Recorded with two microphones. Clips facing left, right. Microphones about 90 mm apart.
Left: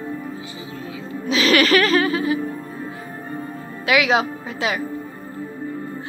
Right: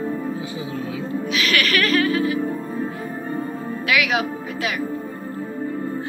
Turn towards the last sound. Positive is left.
turn(degrees=25)  # may be behind; listen again after turning